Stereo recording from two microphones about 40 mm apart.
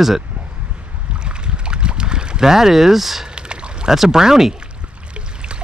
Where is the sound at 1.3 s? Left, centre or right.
Right.